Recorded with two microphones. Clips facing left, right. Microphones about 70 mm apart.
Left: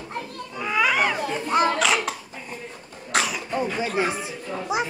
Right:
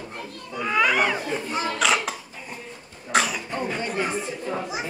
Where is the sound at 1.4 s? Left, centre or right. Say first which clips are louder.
Left 7 dB; left.